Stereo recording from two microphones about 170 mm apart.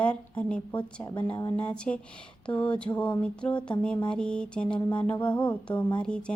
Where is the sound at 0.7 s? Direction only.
25° left (ahead or behind).